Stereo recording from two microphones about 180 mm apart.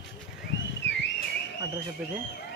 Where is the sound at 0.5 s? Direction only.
85° left.